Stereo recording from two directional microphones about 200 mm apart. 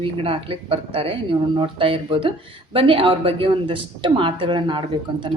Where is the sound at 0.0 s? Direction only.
25° right (ahead or behind).